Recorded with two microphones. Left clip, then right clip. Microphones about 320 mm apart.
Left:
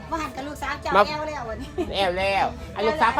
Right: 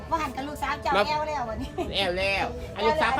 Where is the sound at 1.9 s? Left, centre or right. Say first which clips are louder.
Left 4 dB; centre.